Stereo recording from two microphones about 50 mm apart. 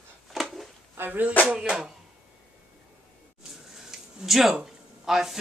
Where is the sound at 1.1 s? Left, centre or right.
Right.